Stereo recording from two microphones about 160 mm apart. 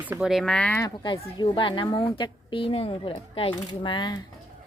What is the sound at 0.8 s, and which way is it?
A woman's voice, 25° left (ahead or behind).